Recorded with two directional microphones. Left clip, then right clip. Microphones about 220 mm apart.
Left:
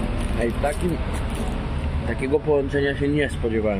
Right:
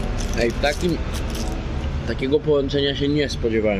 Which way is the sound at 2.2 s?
15° right (ahead or behind).